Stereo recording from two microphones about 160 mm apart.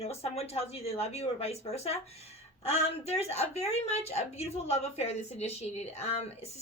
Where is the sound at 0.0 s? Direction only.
40° left (ahead or behind).